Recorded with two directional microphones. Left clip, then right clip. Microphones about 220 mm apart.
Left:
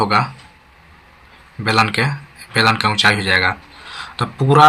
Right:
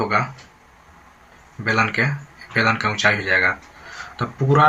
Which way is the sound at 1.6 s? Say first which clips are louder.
Left 3 dB; 30° left (ahead or behind).